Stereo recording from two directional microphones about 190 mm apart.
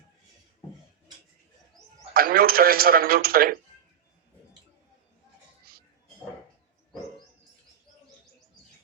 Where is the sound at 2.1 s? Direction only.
50° right (ahead or behind).